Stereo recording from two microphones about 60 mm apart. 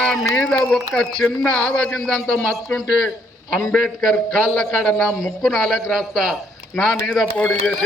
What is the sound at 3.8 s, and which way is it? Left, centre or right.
A man's voice, centre.